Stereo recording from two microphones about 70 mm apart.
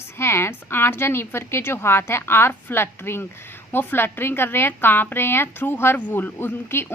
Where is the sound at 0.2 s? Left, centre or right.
Left.